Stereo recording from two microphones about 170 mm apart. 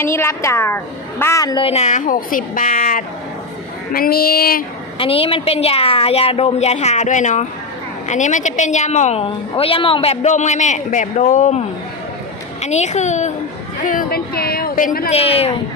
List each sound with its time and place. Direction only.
0.0 s a woman's voice: 15° left (ahead or behind)
1.6 s a woman's voice: 40° left (ahead or behind); by 4.6 s 60° left (ahead or behind)
4.9 s a woman's voice: 35° left (ahead or behind)
12.6 s a woman's voice: 40° left (ahead or behind)
15.1 s a woman's voice: 35° left (ahead or behind)